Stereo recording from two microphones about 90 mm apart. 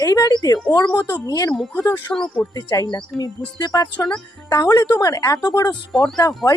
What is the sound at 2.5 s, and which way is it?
Speech, 45° left (ahead or behind).